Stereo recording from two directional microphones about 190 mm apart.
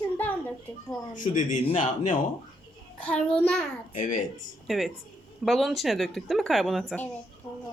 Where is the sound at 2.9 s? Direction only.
5° left (ahead or behind).